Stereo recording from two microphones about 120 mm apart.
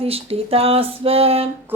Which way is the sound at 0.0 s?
55° right (ahead or behind).